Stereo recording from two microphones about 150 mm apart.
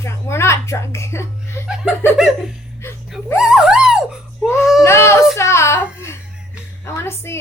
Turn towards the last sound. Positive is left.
turn(degrees=15)  # may be behind; listen again after turning